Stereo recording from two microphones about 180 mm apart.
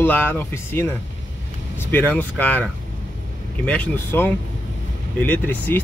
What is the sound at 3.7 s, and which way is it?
Speech, 10° left (ahead or behind).